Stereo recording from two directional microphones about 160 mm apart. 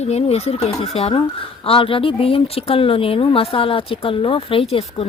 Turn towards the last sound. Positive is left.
turn(degrees=40)  # may be behind; listen again after turning